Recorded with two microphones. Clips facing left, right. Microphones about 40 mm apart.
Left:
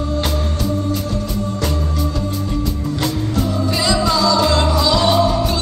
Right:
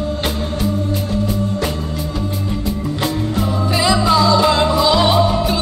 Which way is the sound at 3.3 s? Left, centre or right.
Right.